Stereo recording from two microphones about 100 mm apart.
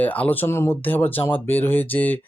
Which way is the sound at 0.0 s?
15° left (ahead or behind).